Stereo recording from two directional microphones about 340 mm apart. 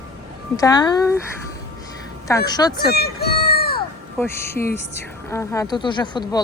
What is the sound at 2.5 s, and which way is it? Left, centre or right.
Speech, centre.